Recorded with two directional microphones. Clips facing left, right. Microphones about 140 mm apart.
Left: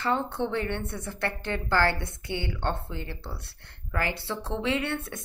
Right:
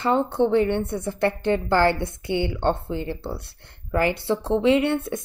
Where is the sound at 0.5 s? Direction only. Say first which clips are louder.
Right 10 dB; 20° right (ahead or behind).